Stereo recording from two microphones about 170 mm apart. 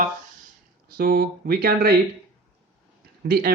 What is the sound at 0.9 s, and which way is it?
Speech, 60° right (ahead or behind).